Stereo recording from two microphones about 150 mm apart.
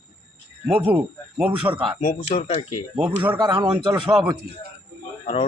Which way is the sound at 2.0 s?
60° left (ahead or behind).